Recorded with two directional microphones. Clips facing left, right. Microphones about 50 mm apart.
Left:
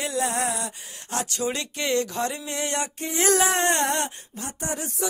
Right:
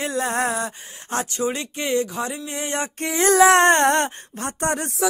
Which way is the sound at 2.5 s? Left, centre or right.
Centre.